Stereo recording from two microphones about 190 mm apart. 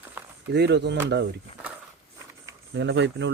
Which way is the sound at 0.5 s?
60° right (ahead or behind).